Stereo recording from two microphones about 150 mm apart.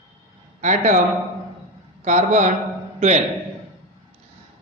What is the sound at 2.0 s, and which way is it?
A man's voice, 50° right (ahead or behind).